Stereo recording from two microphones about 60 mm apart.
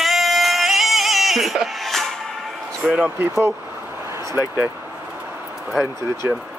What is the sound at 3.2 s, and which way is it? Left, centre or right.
Speech, right.